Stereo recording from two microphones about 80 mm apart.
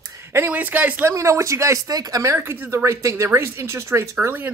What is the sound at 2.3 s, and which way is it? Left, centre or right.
Speech, right.